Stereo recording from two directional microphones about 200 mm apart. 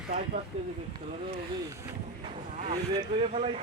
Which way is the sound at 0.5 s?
30° right (ahead or behind).